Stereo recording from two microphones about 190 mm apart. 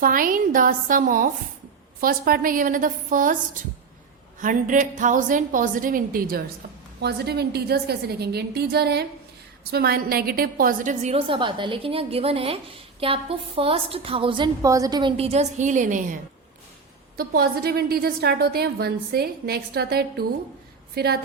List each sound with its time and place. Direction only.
0.0 s a woman's voice: 45° right (ahead or behind)
17.2 s a woman's voice: 50° right (ahead or behind)